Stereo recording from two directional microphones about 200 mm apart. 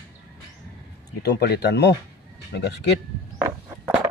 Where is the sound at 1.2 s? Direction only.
55° left (ahead or behind).